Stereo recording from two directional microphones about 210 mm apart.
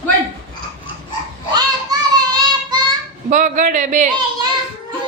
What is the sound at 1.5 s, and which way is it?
Child singing, 20° right (ahead or behind).